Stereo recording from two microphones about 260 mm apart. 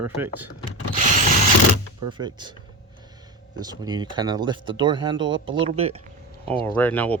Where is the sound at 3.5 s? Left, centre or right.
Centre.